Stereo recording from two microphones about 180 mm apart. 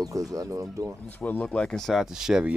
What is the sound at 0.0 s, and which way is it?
Speech, 20° right (ahead or behind).